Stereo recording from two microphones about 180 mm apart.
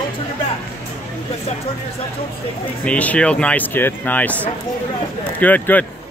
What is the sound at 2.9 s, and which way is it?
Speech, 5° left (ahead or behind).